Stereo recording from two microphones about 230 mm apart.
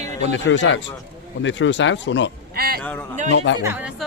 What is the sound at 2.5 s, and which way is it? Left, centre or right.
Speech, right.